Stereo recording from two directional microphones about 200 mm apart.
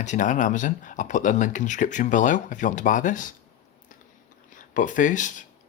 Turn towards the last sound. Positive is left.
turn(degrees=40)  # may be behind; listen again after turning